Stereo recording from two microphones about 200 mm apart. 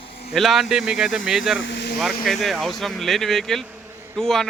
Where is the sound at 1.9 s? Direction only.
Centre (ahead or behind).